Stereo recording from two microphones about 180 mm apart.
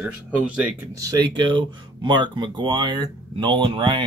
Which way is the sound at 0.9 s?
20° right (ahead or behind).